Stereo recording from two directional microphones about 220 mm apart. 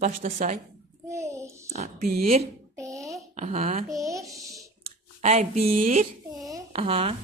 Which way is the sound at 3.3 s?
30° right (ahead or behind).